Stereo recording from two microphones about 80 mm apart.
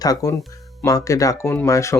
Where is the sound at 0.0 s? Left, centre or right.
Left.